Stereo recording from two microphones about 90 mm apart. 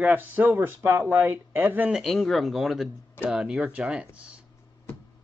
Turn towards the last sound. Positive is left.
turn(degrees=-15)  # may be behind; listen again after turning